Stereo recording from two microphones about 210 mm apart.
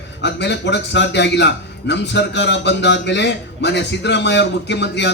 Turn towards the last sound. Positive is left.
turn(degrees=55)  # may be behind; listen again after turning